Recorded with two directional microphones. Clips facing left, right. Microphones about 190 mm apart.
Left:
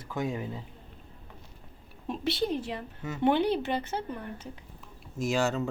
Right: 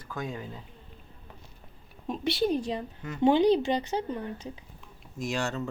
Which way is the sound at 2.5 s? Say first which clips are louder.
Right 3 dB; 15° right (ahead or behind).